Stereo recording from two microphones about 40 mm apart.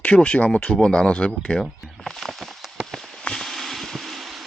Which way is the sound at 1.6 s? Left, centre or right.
Centre.